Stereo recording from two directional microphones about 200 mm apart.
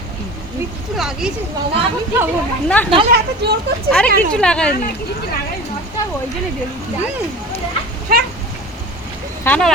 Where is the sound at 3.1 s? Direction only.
55° right (ahead or behind).